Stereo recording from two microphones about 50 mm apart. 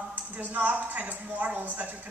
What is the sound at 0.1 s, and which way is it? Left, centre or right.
Speech, right.